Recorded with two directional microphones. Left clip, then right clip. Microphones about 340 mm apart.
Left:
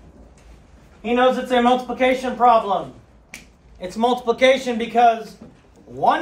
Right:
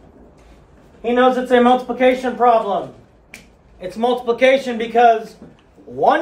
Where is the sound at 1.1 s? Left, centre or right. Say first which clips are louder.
Right 3 dB; centre.